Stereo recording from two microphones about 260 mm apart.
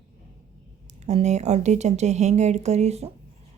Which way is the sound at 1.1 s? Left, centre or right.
Right.